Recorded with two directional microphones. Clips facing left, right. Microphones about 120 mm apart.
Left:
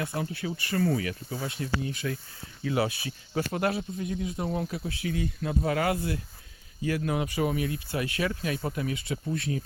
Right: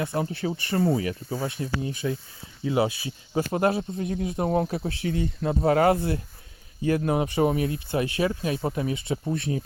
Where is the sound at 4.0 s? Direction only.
50° right (ahead or behind).